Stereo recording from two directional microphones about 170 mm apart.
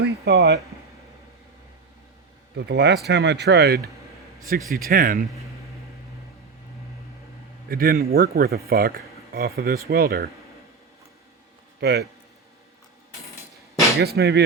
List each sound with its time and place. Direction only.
0.0 s speech: 80° right
2.6 s speech: 85° right
4.7 s speech: 60° right (ahead or behind)
7.7 s speech: 60° right (ahead or behind)
11.8 s speech: 80° right
14.0 s speech: 70° right (ahead or behind)